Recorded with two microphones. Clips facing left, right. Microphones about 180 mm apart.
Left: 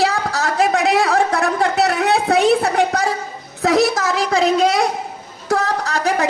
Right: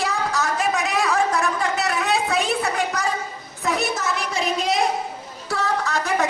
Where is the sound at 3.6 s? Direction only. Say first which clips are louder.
Left 8 dB; 80° left.